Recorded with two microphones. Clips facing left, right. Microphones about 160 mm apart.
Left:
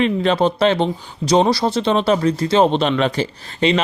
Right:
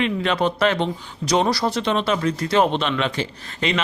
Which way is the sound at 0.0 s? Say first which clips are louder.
Left 5 dB; 35° left (ahead or behind).